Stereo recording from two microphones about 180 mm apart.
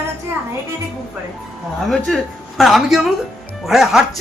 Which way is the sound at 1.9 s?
5° left (ahead or behind).